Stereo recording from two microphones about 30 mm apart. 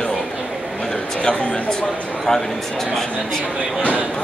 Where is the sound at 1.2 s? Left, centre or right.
Left.